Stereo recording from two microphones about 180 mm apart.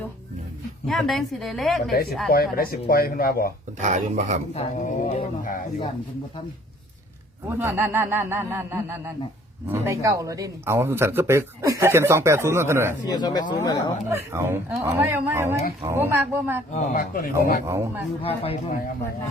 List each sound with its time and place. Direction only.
0.9 s a woman's voice: centre (ahead or behind)
1.9 s speech: 55° left (ahead or behind)
3.8 s speech: 40° right (ahead or behind)
4.5 s speech: 40° left (ahead or behind)
7.4 s speech: 15° right (ahead or behind)
13.1 s speech: 20° left (ahead or behind)
14.1 s speech: 15° right (ahead or behind)
16.7 s speech: 45° left (ahead or behind)
17.7 s speech: 15° right (ahead or behind)
18.2 s speech: 30° left (ahead or behind)